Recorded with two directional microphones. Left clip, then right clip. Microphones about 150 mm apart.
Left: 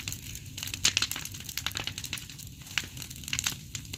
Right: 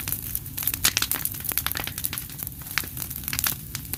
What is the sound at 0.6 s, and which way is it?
Crumpling, 10° left (ahead or behind).